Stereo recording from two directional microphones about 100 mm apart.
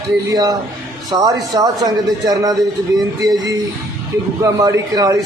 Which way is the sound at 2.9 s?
45° right (ahead or behind).